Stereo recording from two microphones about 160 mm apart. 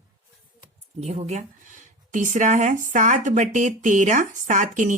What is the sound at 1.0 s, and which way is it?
Speech, 45° right (ahead or behind).